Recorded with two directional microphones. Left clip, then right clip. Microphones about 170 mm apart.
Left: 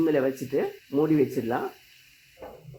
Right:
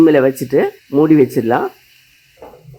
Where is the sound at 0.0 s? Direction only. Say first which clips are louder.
Right 14 dB; 35° right (ahead or behind).